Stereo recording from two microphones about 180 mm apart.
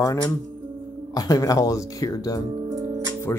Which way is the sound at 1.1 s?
20° left (ahead or behind).